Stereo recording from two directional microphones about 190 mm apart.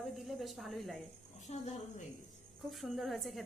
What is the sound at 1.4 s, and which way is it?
Speech, 40° left (ahead or behind).